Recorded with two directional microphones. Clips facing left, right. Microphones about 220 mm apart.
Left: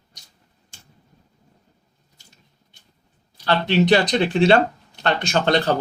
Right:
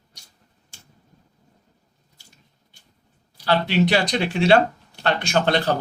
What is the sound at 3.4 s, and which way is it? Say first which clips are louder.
Speech: left 1 dB; 10° right (ahead or behind).